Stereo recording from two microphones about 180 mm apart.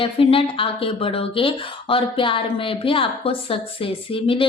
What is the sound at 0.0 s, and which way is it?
Speech, 30° left (ahead or behind).